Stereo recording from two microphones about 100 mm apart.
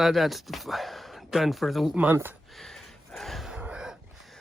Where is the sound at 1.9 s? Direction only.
20° right (ahead or behind).